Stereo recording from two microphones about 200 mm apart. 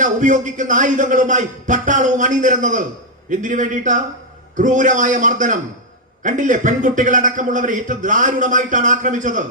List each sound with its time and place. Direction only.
0.0 s a man's voice: 40° right (ahead or behind)